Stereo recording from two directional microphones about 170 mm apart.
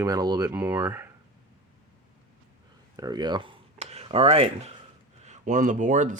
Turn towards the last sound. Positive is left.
turn(degrees=-50)  # may be behind; listen again after turning